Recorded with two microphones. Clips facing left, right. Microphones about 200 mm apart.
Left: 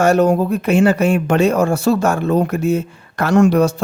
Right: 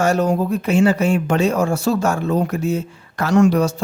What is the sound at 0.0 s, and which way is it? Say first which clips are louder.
Speech: left 4 dB; 60° left (ahead or behind).